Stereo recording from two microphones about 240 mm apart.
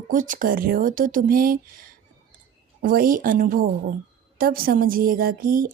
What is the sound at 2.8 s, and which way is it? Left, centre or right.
A woman's voice, right.